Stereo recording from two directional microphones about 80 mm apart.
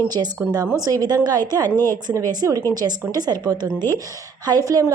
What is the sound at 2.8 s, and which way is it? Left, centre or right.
Speech, right.